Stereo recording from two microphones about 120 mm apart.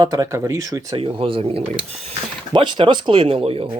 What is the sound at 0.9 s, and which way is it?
Speech, 50° right (ahead or behind).